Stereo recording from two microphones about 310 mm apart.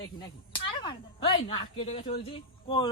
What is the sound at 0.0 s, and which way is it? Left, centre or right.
Speech, centre.